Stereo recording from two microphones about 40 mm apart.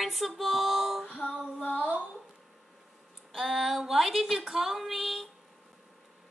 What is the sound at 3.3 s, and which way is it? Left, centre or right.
A woman's voice, centre.